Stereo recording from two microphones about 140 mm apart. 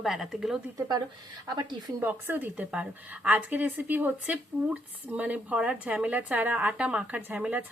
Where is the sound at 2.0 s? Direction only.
15° right (ahead or behind).